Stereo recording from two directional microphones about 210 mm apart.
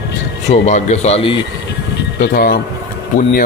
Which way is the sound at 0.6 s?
30° left (ahead or behind).